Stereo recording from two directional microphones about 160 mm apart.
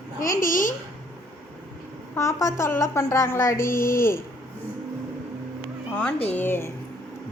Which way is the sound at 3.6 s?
60° left (ahead or behind).